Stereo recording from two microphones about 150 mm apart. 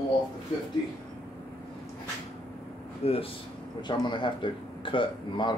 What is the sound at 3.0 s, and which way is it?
A man's voice, 40° left (ahead or behind).